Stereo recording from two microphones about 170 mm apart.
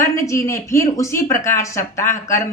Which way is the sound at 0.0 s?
15° left (ahead or behind).